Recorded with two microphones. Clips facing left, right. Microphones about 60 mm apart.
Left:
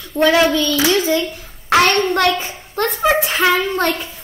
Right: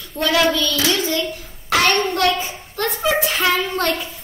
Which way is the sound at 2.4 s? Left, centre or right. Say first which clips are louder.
Left 3 dB; left.